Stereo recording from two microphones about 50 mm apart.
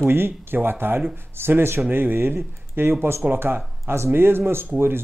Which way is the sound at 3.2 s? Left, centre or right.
Right.